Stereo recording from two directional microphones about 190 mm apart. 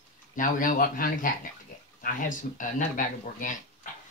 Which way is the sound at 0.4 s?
45° left (ahead or behind).